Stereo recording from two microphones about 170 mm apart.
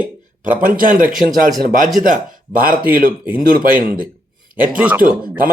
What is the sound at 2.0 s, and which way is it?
Speech, 55° right (ahead or behind).